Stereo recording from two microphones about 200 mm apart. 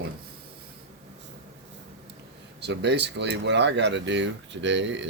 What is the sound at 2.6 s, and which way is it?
Speech, 60° right (ahead or behind).